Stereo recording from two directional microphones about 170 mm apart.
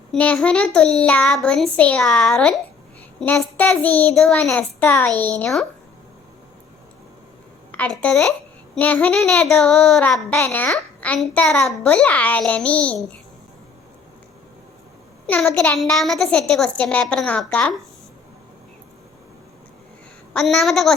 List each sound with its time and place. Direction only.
0.1 s a child's voice: 5° left (ahead or behind)
7.7 s a woman's voice: 10° left (ahead or behind)
15.3 s a child's voice: 5° left (ahead or behind)
20.3 s a child's voice: centre (ahead or behind)